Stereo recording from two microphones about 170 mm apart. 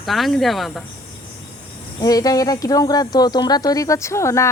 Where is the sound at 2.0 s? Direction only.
20° left (ahead or behind).